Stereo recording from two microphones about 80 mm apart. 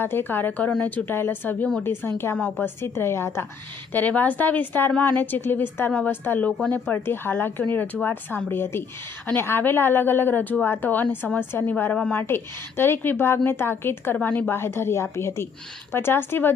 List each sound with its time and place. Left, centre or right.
0.0 s a woman's voice: left
3.9 s a woman's voice: left
12.1 s a woman's voice: left